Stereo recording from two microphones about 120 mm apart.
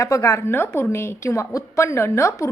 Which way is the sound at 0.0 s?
25° left (ahead or behind).